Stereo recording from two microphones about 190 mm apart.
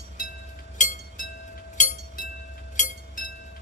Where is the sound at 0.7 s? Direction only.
40° left (ahead or behind).